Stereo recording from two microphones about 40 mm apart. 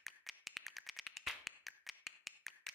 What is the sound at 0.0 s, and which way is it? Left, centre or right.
Tap, centre.